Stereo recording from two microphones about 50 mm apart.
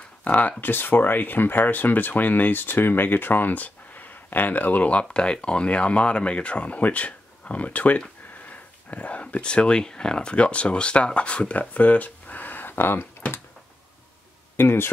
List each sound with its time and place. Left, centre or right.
0.2 s speech: left
0.6 s speech: left
14.6 s speech: left